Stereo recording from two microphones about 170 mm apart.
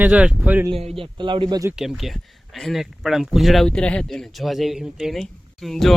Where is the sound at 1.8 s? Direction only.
Centre (ahead or behind).